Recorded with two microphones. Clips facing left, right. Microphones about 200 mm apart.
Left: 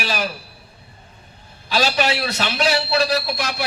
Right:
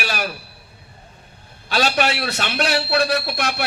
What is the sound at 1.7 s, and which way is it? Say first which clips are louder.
A man's voice: even; 55° right (ahead or behind).